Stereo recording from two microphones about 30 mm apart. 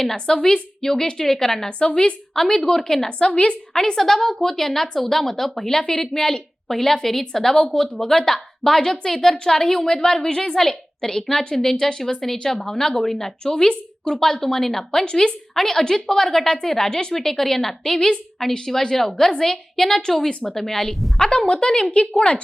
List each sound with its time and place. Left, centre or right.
0.0 s a woman's voice: centre
3.1 s a woman's voice: left
3.7 s a woman's voice: centre
7.6 s speech: left
7.9 s a woman's voice: centre
13.4 s a woman's voice: left
14.4 s a woman's voice: centre
15.0 s speech: left
15.5 s a woman's voice: centre
17.2 s a woman's voice: centre
21.2 s speech: left
22.1 s a woman's voice: left